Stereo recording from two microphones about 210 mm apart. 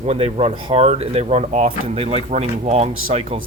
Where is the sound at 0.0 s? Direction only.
30° right (ahead or behind).